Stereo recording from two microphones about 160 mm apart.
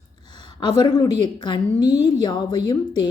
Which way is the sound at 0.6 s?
25° left (ahead or behind).